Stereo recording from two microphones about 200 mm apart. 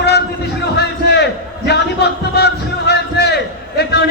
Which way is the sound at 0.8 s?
55° left (ahead or behind).